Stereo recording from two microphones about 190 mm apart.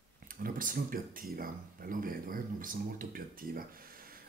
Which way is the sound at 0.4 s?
50° right (ahead or behind).